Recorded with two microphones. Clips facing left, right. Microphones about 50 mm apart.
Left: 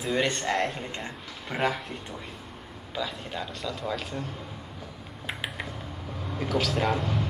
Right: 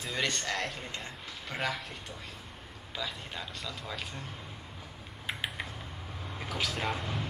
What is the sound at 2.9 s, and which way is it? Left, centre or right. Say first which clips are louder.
A man's voice: left 6 dB; centre.